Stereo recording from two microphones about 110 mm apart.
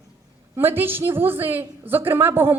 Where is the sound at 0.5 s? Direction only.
20° right (ahead or behind).